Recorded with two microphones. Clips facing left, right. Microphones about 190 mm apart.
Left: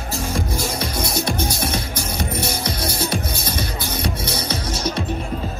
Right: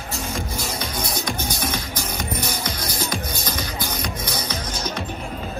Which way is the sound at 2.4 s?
30° left (ahead or behind).